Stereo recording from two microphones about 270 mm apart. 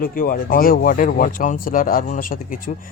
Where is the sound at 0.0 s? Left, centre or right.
Left.